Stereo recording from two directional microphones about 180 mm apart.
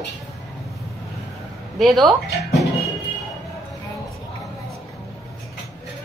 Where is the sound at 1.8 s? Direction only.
Centre (ahead or behind).